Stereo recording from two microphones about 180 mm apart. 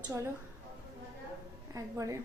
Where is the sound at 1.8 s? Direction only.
15° right (ahead or behind).